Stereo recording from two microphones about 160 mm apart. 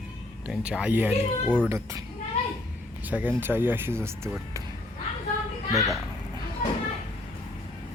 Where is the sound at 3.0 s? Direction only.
10° right (ahead or behind).